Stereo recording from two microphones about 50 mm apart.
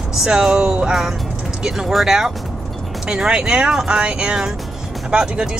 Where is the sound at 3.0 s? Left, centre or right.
Centre.